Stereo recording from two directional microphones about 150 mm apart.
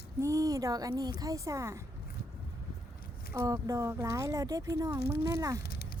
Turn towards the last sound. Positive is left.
turn(degrees=90)